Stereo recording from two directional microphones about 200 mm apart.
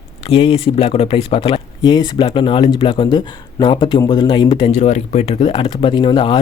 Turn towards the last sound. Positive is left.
turn(degrees=25)  # may be behind; listen again after turning